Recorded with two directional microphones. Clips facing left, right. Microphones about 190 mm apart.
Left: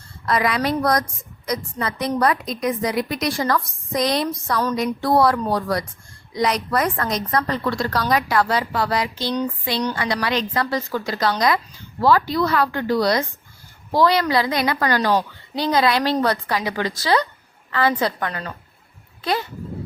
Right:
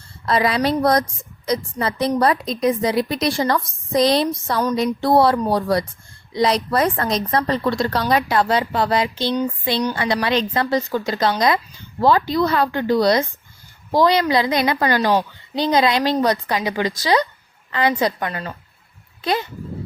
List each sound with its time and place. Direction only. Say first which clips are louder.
0.3 s a woman's voice: right 2 dB; 30° right (ahead or behind)